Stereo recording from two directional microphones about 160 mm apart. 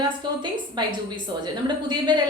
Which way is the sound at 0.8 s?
30° right (ahead or behind).